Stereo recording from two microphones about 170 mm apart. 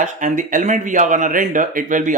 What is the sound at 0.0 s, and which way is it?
Speech, 50° right (ahead or behind).